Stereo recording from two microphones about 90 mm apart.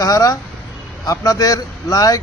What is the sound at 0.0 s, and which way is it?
Speech, 45° left (ahead or behind).